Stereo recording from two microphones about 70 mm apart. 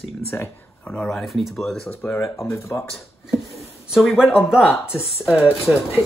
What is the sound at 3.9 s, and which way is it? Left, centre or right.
Speech, centre.